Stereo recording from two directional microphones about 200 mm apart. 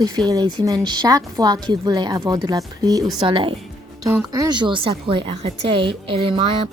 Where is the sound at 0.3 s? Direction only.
20° right (ahead or behind).